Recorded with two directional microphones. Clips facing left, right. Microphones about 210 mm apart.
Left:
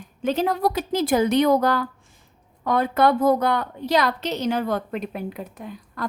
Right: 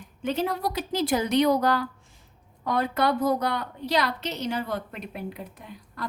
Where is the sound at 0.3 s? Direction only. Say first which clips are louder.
Left 5 dB; 45° left (ahead or behind).